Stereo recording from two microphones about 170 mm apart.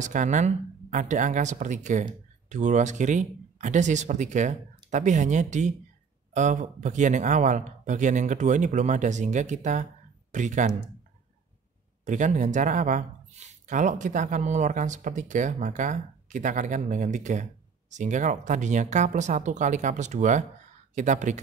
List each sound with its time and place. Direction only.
0.0 s speech: 45° right (ahead or behind)
12.0 s speech: 45° right (ahead or behind)